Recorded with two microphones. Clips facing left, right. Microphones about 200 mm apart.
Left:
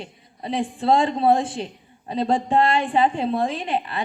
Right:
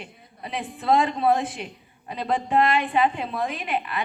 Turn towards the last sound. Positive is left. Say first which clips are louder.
# left 3 dB
turn(degrees=30)  # may be behind; listen again after turning